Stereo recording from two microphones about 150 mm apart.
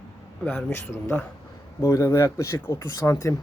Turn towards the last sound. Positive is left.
turn(degrees=20)  # may be behind; listen again after turning